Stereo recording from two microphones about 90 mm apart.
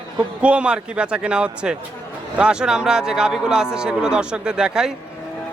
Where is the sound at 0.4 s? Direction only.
15° right (ahead or behind).